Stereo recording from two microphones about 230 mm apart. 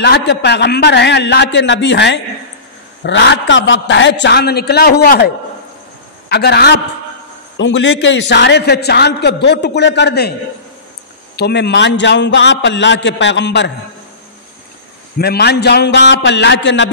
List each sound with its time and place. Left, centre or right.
0.0 s a man's voice: left
11.3 s a man's voice: left
15.1 s a man's voice: left